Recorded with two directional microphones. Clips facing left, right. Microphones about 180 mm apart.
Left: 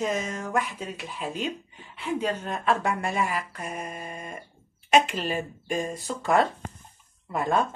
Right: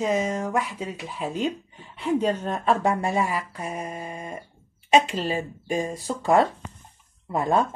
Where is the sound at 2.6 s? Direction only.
35° right (ahead or behind).